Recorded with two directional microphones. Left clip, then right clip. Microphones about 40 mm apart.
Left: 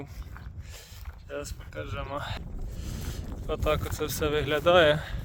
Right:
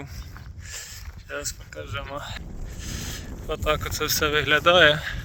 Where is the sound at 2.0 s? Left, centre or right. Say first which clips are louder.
Right 1 dB; centre; by 4.0 s left.